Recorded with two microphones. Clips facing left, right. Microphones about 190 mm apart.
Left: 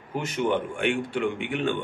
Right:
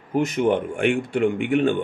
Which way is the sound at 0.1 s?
50° right (ahead or behind).